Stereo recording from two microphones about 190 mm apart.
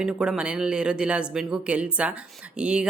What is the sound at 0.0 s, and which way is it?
Speech, 5° right (ahead or behind).